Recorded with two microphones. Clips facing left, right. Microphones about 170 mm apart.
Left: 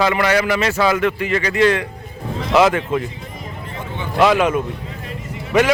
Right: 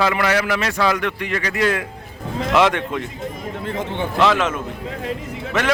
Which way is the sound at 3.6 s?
90° right.